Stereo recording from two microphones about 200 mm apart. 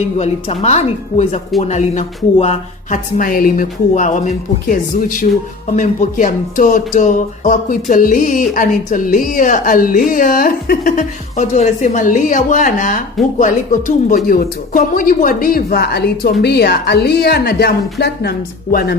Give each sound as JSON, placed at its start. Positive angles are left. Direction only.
{"t": 0.2, "sound": "a woman's voice", "side_deg": 30}